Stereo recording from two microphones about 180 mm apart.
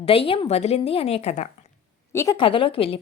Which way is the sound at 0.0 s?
30° left (ahead or behind).